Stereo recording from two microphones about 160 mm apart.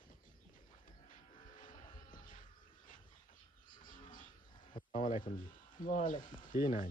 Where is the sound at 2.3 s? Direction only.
55° left (ahead or behind).